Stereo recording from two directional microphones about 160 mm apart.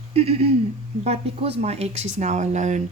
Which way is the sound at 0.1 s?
40° right (ahead or behind).